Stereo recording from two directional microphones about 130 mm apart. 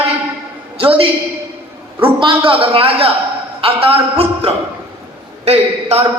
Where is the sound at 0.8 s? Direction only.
45° right (ahead or behind).